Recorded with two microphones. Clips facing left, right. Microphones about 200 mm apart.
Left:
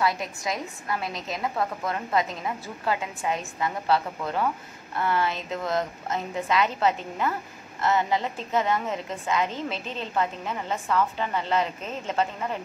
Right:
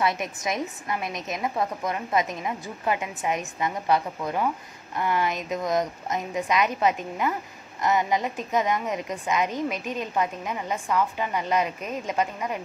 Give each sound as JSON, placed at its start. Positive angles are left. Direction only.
{"t": 0.0, "sound": "a woman's voice", "side_deg": -20}